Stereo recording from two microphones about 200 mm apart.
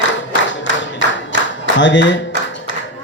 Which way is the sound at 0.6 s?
65° left (ahead or behind).